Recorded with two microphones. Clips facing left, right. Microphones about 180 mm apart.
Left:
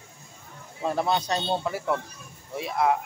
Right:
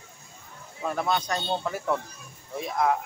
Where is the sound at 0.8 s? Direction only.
30° left (ahead or behind).